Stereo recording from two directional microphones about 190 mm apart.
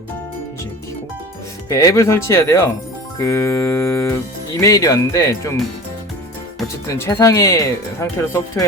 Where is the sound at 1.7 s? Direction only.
15° left (ahead or behind).